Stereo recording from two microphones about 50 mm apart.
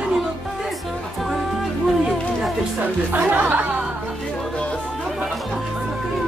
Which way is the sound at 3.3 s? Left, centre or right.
Right.